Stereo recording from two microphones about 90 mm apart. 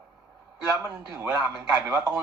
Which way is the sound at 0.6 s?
30° right (ahead or behind).